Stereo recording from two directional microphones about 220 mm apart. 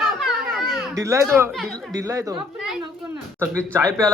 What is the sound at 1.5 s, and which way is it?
Speech, centre (ahead or behind).